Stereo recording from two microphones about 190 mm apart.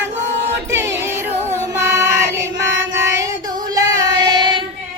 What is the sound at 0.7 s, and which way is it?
Music, 15° right (ahead or behind).